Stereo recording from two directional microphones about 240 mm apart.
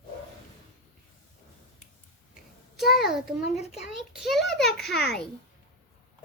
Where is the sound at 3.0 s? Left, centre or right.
Centre.